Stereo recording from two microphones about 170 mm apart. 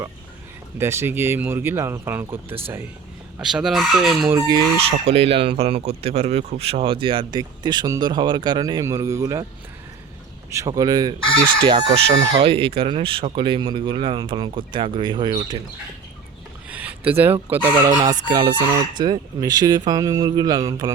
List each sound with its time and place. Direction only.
0.8 s speech: 15° right (ahead or behind)
3.4 s chicken: 5° right (ahead or behind)
4.3 s speech: 20° right (ahead or behind)
5.0 s speech: 35° right (ahead or behind); by 9.5 s 20° right (ahead or behind)
10.5 s speech: 20° right (ahead or behind)
16.6 s a sound: 10° right (ahead or behind)
17.1 s speech: 10° right (ahead or behind)
18.1 s speech: 25° right (ahead or behind)